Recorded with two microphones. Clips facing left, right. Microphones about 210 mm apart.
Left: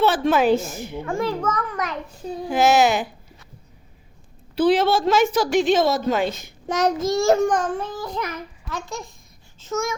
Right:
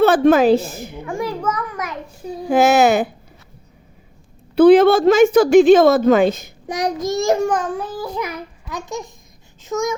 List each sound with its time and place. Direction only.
0.3 s a woman's voice: 40° right (ahead or behind)
1.2 s child singing: 10° right (ahead or behind)
2.5 s a woman's voice: 55° right (ahead or behind)
4.5 s a woman's voice: 55° right (ahead or behind)
6.7 s child singing: 15° right (ahead or behind)